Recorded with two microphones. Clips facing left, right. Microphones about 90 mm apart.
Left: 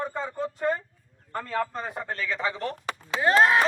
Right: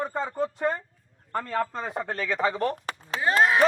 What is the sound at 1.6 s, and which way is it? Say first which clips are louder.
Speech: right 1 dB; 20° right (ahead or behind).